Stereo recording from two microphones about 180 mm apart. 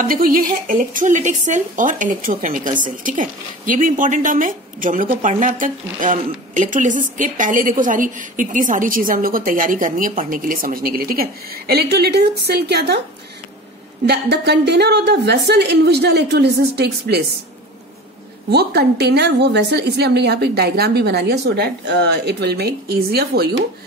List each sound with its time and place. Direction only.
0.1 s a woman's voice: 50° right (ahead or behind); by 13.0 s 65° right (ahead or behind)
14.0 s a woman's voice: 65° right (ahead or behind)
18.5 s a woman's voice: 65° right (ahead or behind)